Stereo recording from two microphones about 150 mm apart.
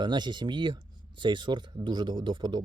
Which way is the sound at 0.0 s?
30° right (ahead or behind).